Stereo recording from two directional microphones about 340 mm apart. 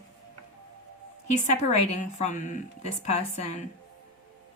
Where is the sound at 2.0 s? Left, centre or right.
Left.